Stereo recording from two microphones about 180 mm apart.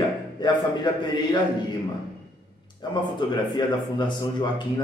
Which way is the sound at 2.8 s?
25° left (ahead or behind).